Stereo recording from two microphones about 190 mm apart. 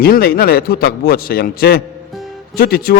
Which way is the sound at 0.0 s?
55° left (ahead or behind).